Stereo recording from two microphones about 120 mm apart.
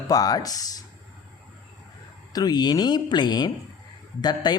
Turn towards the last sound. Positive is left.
turn(degrees=35)  # may be behind; listen again after turning